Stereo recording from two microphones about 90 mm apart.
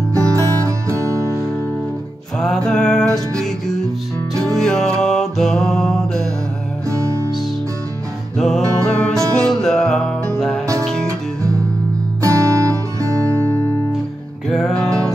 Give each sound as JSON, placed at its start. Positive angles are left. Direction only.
{"t": 0.1, "sound": "music", "side_deg": -35}
{"t": 2.4, "sound": "music", "side_deg": 5}
{"t": 6.9, "sound": "music", "side_deg": -35}
{"t": 8.4, "sound": "music", "side_deg": 5}
{"t": 11.1, "sound": "music", "side_deg": -35}
{"t": 14.5, "sound": "music", "side_deg": 5}